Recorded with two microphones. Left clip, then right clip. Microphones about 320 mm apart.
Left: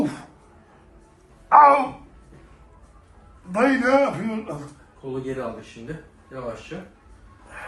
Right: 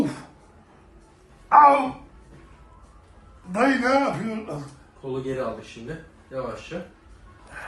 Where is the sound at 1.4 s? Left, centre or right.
Centre.